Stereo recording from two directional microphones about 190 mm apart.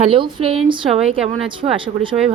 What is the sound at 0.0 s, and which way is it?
A woman's voice, 25° right (ahead or behind).